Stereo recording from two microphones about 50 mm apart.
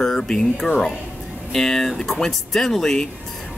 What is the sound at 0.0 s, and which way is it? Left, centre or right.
Speech, centre.